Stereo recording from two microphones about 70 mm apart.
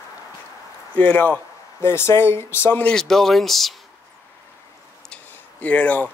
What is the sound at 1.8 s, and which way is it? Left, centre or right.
Speech, left.